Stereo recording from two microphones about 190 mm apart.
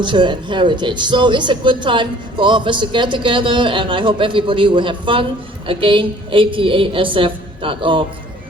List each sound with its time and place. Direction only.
0.0 s speech: 25° right (ahead or behind)